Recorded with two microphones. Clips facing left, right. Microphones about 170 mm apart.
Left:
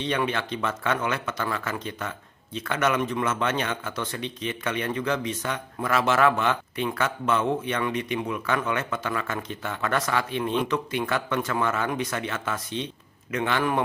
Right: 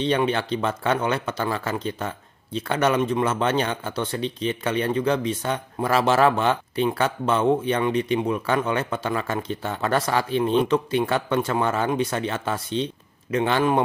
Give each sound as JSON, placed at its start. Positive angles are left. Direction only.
{"t": 0.0, "sound": "speech", "side_deg": -30}